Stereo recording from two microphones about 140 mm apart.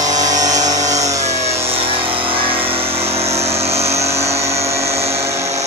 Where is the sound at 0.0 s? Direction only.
25° right (ahead or behind).